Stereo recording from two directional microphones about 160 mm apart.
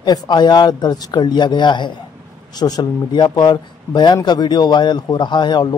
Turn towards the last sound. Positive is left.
turn(degrees=25)  # may be behind; listen again after turning